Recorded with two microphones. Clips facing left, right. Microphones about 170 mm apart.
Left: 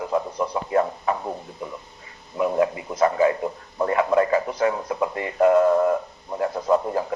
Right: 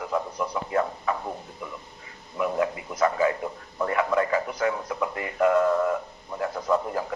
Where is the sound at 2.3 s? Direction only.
25° left (ahead or behind).